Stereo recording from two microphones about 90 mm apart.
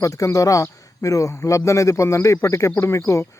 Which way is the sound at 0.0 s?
40° left (ahead or behind).